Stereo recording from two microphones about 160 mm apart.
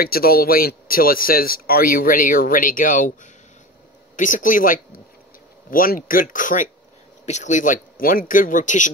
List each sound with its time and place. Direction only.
0.0 s a man's voice: 70° left (ahead or behind)
4.2 s a man's voice: 55° left (ahead or behind)